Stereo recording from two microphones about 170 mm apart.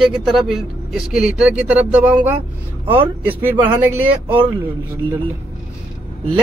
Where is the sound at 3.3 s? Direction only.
10° right (ahead or behind).